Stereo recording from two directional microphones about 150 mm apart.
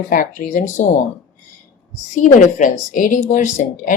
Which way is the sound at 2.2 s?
60° left (ahead or behind).